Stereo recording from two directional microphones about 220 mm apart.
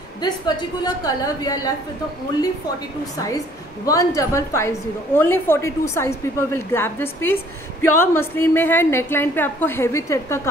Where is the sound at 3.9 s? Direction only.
15° left (ahead or behind).